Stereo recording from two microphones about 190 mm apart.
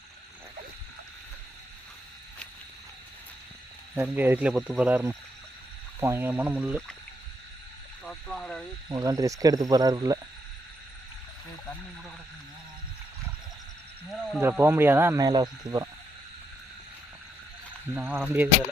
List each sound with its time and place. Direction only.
3.9 s speech: 10° right (ahead or behind)
8.0 s speech: 5° left (ahead or behind)
8.9 s speech: 20° right (ahead or behind)
14.4 s speech: 10° right (ahead or behind)
17.9 s speech: 10° right (ahead or behind)